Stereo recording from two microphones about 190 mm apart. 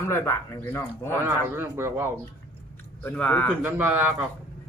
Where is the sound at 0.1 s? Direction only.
10° left (ahead or behind).